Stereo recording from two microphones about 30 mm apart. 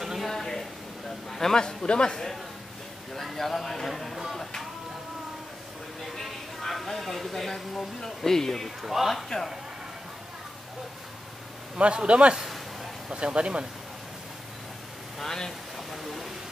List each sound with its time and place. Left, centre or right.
0.0 s a sound: centre
0.3 s a sound: centre
1.5 s a man's voice: left
3.2 s speech: centre
3.9 s speech: centre
6.6 s speech: centre
8.8 s speech: centre
9.1 s speech: centre
11.7 s speech: right
12.4 s a sound: centre
13.1 s speech: right
15.2 s speech: centre
15.9 s a sound: centre